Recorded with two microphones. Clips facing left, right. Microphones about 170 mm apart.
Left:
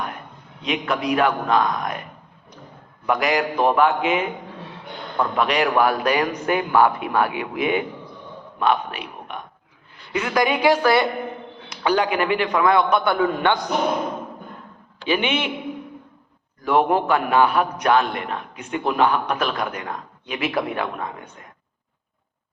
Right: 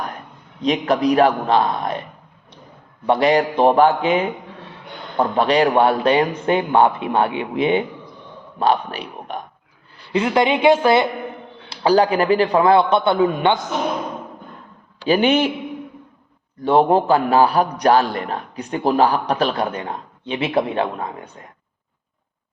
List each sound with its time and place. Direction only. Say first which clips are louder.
0.6 s a man's voice: right 6 dB; 35° right (ahead or behind)
3.1 s a man's voice: right 5 dB; 30° right (ahead or behind)
11.7 s a man's voice: right 5 dB; 35° right (ahead or behind)
15.0 s a man's voice: right 6 dB; 40° right (ahead or behind)
16.6 s a man's voice: right 4 dB; 30° right (ahead or behind)